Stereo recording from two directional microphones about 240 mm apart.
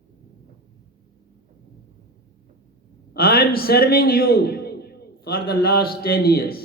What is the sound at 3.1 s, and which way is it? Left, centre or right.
A man's voice, left.